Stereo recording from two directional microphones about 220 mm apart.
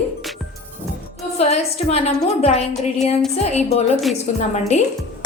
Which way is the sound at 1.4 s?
30° left (ahead or behind).